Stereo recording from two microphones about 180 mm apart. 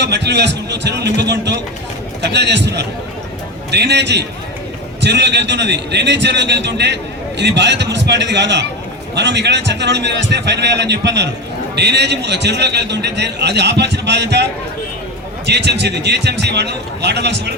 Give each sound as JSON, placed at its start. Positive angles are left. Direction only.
{"t": 0.0, "sound": "a man's voice", "side_deg": -70}
{"t": 15.4, "sound": "a man's voice", "side_deg": -70}